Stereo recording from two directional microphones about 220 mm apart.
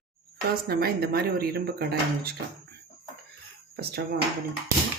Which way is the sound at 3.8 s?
45° right (ahead or behind).